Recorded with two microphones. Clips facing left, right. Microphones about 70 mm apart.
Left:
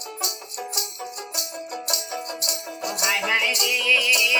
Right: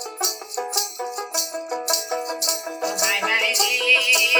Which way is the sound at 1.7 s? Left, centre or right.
Right.